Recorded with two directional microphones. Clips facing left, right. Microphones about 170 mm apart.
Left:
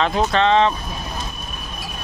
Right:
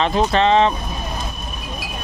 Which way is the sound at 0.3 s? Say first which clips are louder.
Right 1 dB; 5° right (ahead or behind).